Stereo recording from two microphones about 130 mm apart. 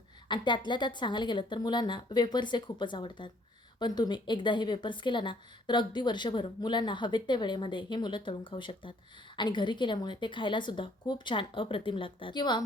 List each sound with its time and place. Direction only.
0.3 s speech: 35° left (ahead or behind)